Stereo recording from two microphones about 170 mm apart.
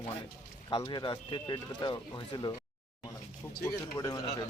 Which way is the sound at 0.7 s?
25° left (ahead or behind).